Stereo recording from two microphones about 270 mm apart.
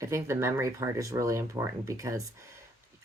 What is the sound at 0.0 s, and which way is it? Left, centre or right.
Speech, centre.